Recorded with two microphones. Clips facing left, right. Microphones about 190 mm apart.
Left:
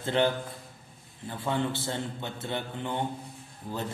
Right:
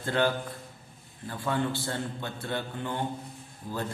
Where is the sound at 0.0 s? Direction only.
20° left (ahead or behind).